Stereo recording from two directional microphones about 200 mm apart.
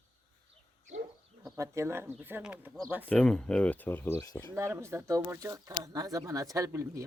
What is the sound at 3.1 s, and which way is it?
Speech, 5° left (ahead or behind).